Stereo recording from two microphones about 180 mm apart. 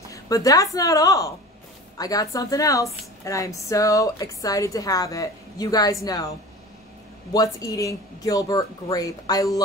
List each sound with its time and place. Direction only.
0.1 s a woman's voice: 20° left (ahead or behind)
7.3 s a woman's voice: 20° left (ahead or behind)